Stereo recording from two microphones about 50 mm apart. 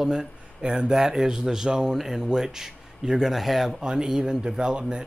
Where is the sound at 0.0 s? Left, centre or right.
Centre.